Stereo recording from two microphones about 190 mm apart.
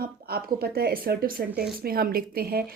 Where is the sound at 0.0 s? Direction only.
50° right (ahead or behind).